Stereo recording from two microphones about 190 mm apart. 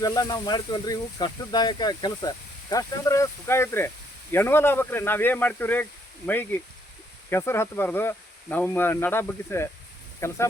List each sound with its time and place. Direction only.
0.0 s speech: 20° left (ahead or behind)